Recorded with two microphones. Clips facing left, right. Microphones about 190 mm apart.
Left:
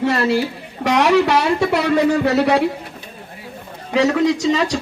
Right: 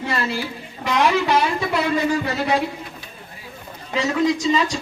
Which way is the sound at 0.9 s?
70° left (ahead or behind).